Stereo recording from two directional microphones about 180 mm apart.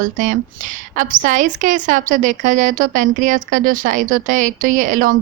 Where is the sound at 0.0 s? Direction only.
45° right (ahead or behind).